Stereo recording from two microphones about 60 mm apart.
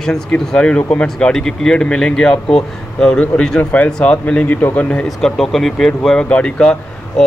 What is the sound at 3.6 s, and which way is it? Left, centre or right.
Speech, left.